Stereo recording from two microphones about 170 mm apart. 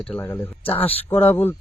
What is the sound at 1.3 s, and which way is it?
Speech, 10° left (ahead or behind).